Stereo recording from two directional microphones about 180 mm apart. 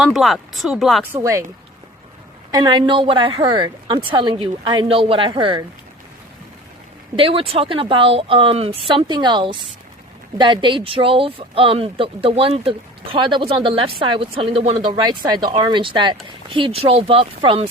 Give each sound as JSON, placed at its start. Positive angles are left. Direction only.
{"t": 0.0, "sound": "speech", "side_deg": 0}
{"t": 1.1, "sound": "speech", "side_deg": -15}
{"t": 2.5, "sound": "speech", "side_deg": -20}
{"t": 7.2, "sound": "speech", "side_deg": -30}
{"t": 15.0, "sound": "speech", "side_deg": -25}